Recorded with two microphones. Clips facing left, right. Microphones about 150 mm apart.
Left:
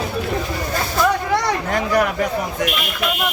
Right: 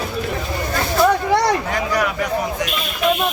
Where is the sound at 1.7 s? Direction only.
50° left (ahead or behind).